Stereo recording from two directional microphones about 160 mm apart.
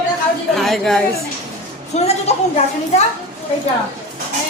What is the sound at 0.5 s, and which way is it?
Speech, centre (ahead or behind).